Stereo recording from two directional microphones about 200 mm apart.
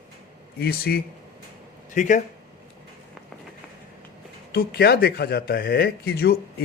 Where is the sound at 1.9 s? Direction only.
40° left (ahead or behind).